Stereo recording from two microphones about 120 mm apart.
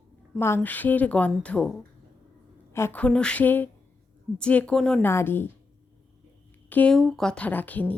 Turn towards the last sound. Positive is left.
turn(degrees=15)  # may be behind; listen again after turning